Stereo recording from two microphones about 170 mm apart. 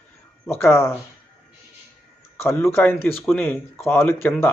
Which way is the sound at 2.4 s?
15° left (ahead or behind).